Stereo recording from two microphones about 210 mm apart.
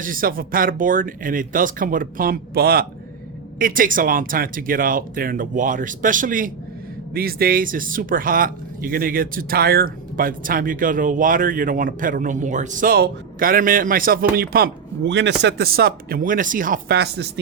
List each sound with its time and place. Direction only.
0.0 s speech: 40° right (ahead or behind)